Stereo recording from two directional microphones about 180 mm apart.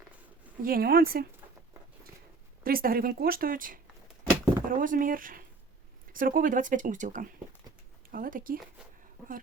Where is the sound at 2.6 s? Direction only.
55° right (ahead or behind).